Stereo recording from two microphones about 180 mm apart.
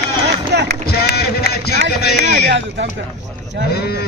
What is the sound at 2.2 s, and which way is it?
Speech, 65° right (ahead or behind).